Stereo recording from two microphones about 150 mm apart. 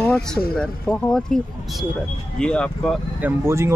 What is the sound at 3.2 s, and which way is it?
Speech, 15° right (ahead or behind).